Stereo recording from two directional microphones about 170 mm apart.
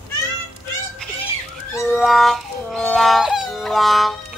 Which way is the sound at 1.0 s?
5° left (ahead or behind).